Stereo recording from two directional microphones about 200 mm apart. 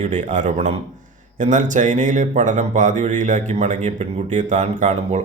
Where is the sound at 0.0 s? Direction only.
40° right (ahead or behind).